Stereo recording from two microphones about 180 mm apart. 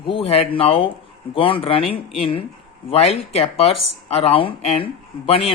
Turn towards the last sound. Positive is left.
turn(degrees=30)  # may be behind; listen again after turning